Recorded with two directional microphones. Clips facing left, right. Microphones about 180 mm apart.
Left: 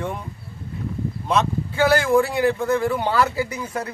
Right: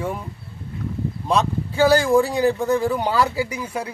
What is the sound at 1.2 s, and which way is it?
Speech, 15° right (ahead or behind).